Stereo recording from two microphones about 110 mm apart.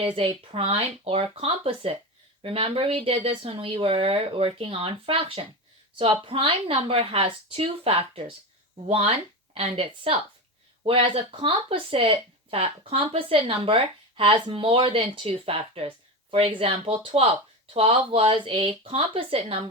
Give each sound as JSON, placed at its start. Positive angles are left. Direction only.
{"t": 0.0, "sound": "speech", "side_deg": -55}